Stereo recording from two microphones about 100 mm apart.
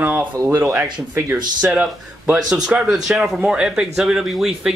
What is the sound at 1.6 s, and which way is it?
A man's voice, 15° right (ahead or behind).